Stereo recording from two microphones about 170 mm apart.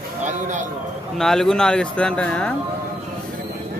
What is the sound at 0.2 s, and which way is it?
Speech, 45° right (ahead or behind).